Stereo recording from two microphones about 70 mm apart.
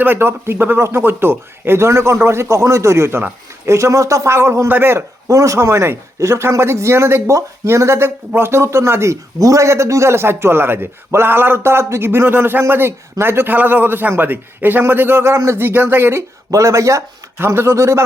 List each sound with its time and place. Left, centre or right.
0.0 s a man's voice: right
5.3 s a man's voice: right
16.5 s speech: right
17.3 s a man's voice: right